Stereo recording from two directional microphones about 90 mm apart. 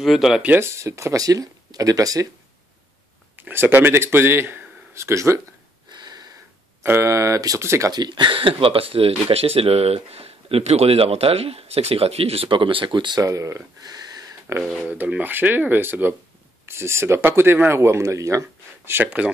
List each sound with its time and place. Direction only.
0.0 s speech: centre (ahead or behind)
0.6 s speech: 35° right (ahead or behind)
3.3 s speech: 20° right (ahead or behind)
5.9 s a sound: 50° right (ahead or behind)
6.8 s speech: 30° right (ahead or behind)
7.9 s speech: 55° right (ahead or behind)
13.2 s speech: 35° right (ahead or behind)
13.8 s a sound: 45° right (ahead or behind)
14.6 s speech: centre (ahead or behind)
14.9 s speech: 15° right (ahead or behind)